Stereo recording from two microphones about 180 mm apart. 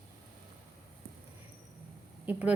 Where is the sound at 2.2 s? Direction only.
5° right (ahead or behind).